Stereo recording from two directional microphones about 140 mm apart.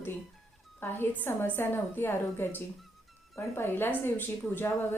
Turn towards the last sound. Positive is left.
turn(degrees=15)  # may be behind; listen again after turning